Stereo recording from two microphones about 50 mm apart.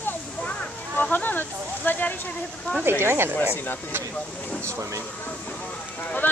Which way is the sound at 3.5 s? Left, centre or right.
Left.